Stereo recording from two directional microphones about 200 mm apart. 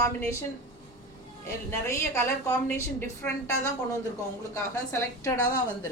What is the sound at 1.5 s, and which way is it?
A woman's voice, 15° left (ahead or behind).